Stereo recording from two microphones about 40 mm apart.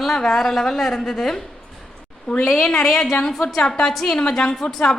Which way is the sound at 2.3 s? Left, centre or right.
Left.